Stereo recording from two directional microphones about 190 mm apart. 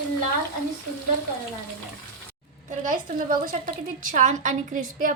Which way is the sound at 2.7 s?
45° right (ahead or behind).